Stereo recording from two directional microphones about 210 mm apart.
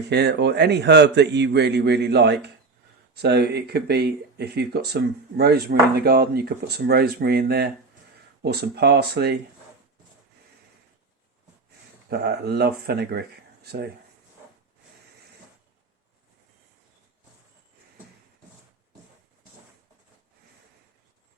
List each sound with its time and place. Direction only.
0.1 s speech: 50° right (ahead or behind)
12.0 s speech: 50° right (ahead or behind)